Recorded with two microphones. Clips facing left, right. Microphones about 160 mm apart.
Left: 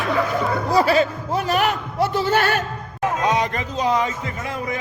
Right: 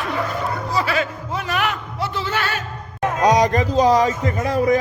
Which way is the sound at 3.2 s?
35° right (ahead or behind).